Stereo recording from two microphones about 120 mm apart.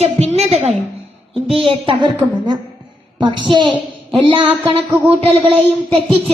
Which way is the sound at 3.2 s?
40° right (ahead or behind).